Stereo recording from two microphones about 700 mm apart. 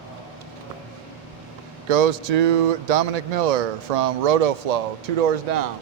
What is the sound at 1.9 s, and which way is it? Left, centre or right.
Speech, right.